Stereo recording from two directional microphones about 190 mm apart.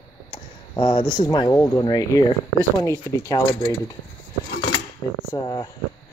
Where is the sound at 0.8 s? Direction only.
25° left (ahead or behind).